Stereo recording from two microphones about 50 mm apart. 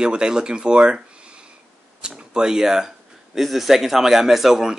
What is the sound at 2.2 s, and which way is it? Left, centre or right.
Speech, centre.